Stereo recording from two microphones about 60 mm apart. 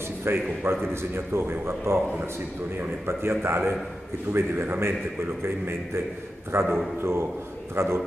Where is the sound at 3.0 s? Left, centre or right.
Right.